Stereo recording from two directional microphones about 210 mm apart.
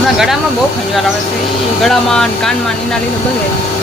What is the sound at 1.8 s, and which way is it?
Speech, centre (ahead or behind).